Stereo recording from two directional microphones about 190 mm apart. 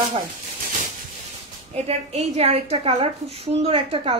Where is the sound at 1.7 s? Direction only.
35° right (ahead or behind).